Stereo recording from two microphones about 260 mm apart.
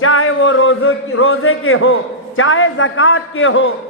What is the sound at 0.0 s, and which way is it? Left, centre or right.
A man's voice, left.